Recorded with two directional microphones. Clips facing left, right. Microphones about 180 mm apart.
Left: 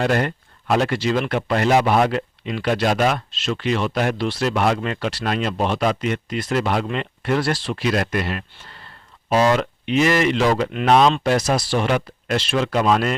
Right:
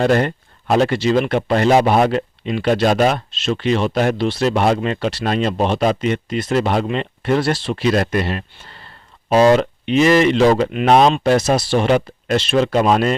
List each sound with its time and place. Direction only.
0.0 s speech: 30° right (ahead or behind)